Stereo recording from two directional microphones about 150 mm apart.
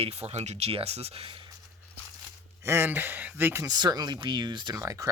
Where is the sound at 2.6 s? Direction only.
15° right (ahead or behind).